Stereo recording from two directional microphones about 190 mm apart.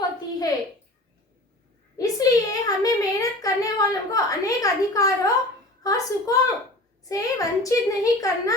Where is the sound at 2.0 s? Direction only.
20° left (ahead or behind).